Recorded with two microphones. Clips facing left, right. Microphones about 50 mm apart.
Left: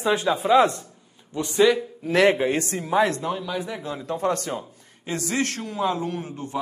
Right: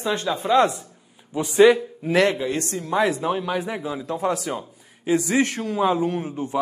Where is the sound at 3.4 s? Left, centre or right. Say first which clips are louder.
Right 3 dB; right.